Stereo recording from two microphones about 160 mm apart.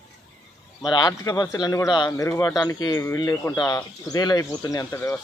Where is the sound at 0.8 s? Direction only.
25° left (ahead or behind).